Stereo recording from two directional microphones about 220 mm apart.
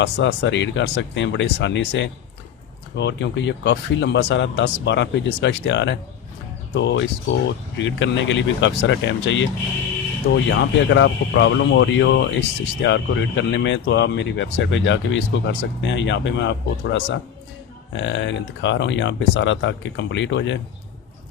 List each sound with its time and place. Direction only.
0.0 s speech: 55° left (ahead or behind)
10.5 s speech: 55° left (ahead or behind)